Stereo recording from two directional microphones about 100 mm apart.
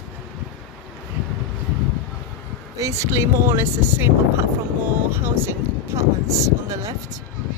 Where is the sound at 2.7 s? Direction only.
30° right (ahead or behind).